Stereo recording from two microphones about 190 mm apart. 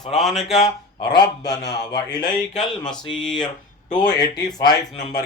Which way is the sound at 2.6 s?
5° left (ahead or behind).